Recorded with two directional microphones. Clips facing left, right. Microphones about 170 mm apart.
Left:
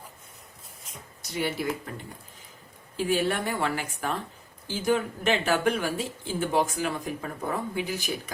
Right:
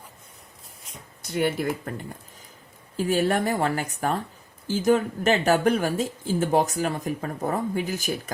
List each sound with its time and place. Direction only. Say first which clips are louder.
1.2 s speech: right 5 dB; 50° right (ahead or behind)
3.0 s speech: right 3 dB; 45° right (ahead or behind)